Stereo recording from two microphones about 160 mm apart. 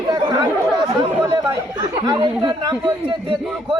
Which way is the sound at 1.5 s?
25° right (ahead or behind).